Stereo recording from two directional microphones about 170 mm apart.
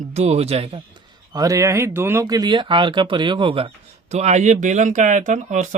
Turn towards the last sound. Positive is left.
turn(degrees=-45)  # may be behind; listen again after turning